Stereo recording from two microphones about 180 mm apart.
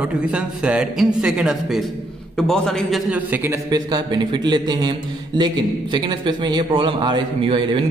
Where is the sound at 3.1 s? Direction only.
10° right (ahead or behind).